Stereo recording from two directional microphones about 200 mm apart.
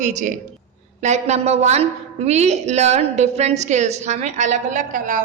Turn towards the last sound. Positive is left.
turn(degrees=-40)  # may be behind; listen again after turning